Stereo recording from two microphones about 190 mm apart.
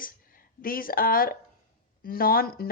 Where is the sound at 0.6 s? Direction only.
50° left (ahead or behind).